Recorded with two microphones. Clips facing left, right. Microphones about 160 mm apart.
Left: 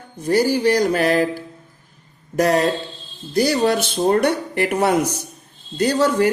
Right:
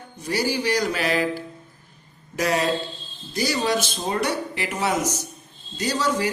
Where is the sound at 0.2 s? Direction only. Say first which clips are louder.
Left 7 dB; 50° left (ahead or behind).